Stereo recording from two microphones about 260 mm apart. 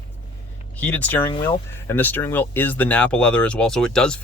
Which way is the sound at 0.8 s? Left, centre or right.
Centre.